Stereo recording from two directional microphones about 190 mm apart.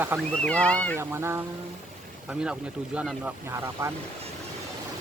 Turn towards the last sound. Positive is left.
turn(degrees=-15)  # may be behind; listen again after turning